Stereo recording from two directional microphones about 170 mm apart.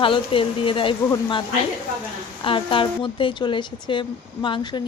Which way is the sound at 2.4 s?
30° left (ahead or behind).